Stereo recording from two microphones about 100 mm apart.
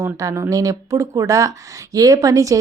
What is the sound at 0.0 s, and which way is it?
A woman's voice, 30° right (ahead or behind).